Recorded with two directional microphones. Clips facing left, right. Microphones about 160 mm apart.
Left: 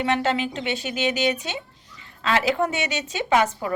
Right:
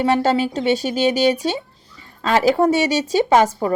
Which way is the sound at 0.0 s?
40° right (ahead or behind).